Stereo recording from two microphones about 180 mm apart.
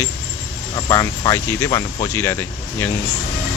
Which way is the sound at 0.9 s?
15° left (ahead or behind).